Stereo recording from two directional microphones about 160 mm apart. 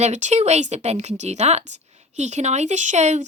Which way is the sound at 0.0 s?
45° right (ahead or behind).